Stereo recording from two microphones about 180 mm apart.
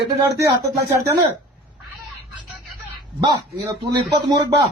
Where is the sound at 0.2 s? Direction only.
15° right (ahead or behind).